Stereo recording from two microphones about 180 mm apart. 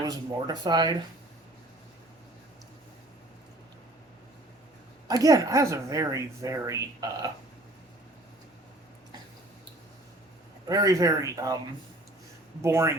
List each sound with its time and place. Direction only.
0.0 s speech: 20° right (ahead or behind)
5.0 s a woman's voice: 20° right (ahead or behind)
10.7 s speech: 20° right (ahead or behind)
12.6 s a woman's voice: 15° right (ahead or behind)